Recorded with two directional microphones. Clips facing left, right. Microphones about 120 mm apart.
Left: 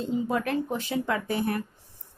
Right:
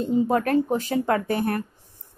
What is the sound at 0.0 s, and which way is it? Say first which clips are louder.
Speech: right 6 dB; 45° right (ahead or behind).